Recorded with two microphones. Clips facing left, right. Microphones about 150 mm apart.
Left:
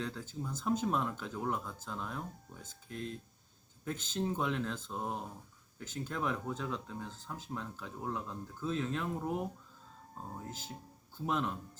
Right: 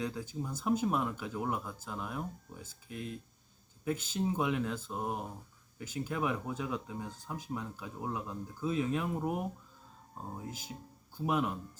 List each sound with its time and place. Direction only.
0.0 s speech: 10° right (ahead or behind)
10.3 s speech: 10° right (ahead or behind)